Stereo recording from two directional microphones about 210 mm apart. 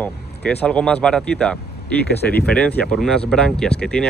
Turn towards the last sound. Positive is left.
turn(degrees=5)  # may be behind; listen again after turning